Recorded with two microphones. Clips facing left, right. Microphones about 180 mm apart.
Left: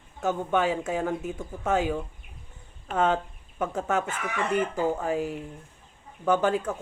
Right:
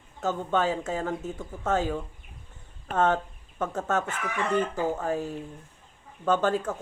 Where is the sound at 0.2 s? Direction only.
15° left (ahead or behind).